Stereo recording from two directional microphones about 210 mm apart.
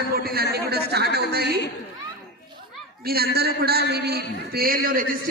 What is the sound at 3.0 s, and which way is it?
A woman's voice, 45° right (ahead or behind).